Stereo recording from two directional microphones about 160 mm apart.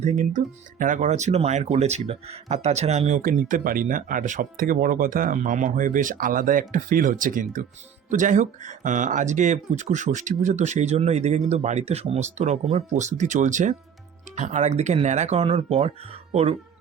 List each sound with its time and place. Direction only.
0.0 s speech: 50° right (ahead or behind)